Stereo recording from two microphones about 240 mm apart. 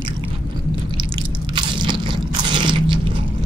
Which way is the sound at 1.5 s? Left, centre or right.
Centre.